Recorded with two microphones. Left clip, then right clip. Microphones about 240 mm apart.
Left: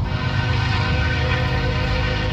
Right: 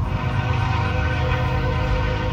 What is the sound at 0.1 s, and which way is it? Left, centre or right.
Music, left.